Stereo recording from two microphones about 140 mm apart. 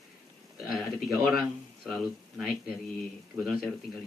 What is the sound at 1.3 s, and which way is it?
Speech, centre (ahead or behind).